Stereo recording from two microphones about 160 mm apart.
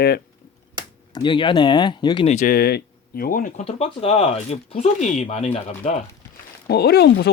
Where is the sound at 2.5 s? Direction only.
80° left; by 3.5 s 60° left (ahead or behind).